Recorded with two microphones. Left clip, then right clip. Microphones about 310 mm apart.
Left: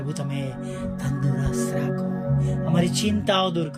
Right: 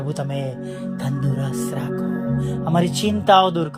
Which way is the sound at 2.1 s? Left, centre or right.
Left.